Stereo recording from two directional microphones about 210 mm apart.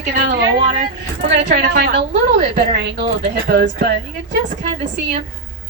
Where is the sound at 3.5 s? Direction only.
50° right (ahead or behind).